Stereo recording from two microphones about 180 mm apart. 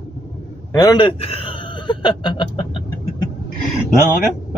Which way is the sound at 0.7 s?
20° left (ahead or behind).